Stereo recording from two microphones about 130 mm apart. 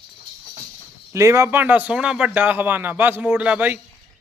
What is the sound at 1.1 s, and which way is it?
Speech, 20° right (ahead or behind).